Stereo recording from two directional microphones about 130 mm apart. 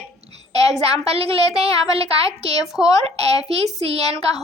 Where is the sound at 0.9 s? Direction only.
50° right (ahead or behind).